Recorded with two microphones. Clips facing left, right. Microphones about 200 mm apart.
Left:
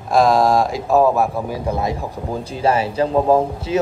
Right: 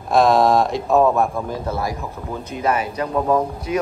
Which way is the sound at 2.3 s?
30° left (ahead or behind).